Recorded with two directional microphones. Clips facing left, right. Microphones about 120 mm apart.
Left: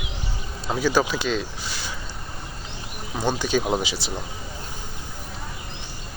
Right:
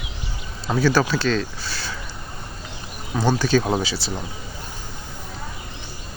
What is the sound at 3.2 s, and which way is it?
Speech, 15° left (ahead or behind).